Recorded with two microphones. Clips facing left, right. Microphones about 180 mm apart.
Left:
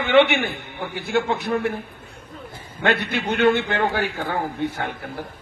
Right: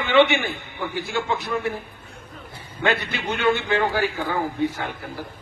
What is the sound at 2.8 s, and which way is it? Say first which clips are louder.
A man's voice: left 2 dB; 60° left (ahead or behind).